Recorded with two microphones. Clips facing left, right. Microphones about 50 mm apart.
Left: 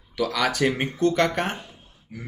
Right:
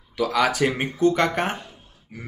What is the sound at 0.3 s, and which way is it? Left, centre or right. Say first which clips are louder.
Speech: right 3 dB; centre.